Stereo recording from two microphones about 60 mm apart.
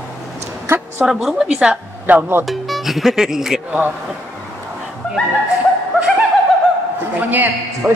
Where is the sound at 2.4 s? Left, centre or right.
Centre.